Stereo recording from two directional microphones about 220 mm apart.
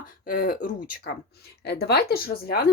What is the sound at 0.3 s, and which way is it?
Speech, 40° left (ahead or behind).